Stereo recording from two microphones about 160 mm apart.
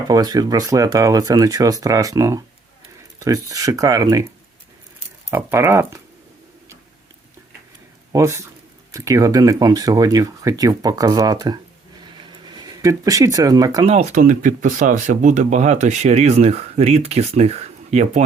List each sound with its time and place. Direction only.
0.1 s speech: 25° right (ahead or behind)
5.3 s speech: 15° right (ahead or behind)
8.1 s speech: 15° right (ahead or behind)
13.8 s speech: 45° right (ahead or behind)